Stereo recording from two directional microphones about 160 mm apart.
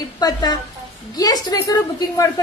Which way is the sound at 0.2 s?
25° left (ahead or behind).